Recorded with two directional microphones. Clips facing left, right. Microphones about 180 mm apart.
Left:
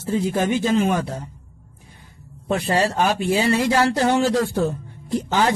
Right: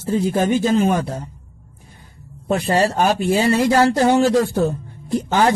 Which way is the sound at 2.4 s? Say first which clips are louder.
Right 3 dB; 40° right (ahead or behind).